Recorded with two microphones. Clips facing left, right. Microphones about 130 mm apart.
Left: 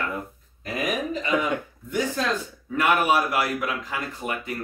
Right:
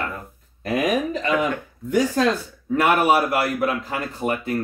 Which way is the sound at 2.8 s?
35° right (ahead or behind).